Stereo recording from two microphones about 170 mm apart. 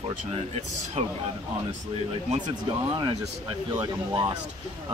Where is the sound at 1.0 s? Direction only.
40° right (ahead or behind).